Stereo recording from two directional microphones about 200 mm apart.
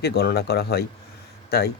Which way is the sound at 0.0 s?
50° left (ahead or behind).